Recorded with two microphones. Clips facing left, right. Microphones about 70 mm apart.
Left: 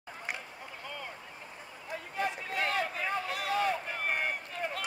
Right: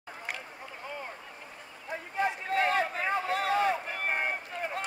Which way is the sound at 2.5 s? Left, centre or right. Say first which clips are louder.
Right 6 dB; right.